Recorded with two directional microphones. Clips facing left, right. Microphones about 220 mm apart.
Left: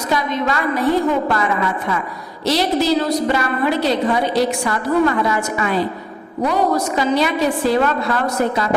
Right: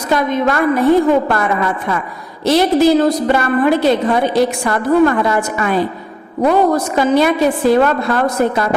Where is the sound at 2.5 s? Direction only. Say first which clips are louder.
Right 6 dB; 50° right (ahead or behind).